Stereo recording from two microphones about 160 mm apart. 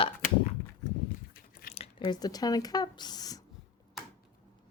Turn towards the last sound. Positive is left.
turn(degrees=25)  # may be behind; listen again after turning